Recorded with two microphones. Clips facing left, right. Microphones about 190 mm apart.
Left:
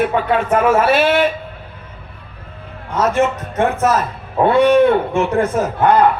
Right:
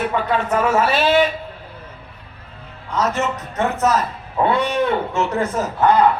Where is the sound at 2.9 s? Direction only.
50° left (ahead or behind).